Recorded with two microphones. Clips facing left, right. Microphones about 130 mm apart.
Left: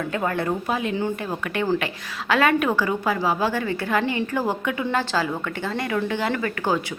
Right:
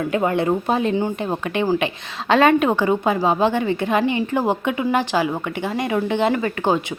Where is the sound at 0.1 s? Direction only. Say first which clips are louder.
Right 6 dB; 20° right (ahead or behind).